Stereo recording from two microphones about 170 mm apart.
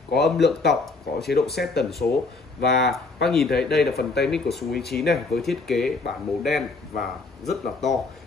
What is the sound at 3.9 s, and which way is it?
Speech, 70° left (ahead or behind).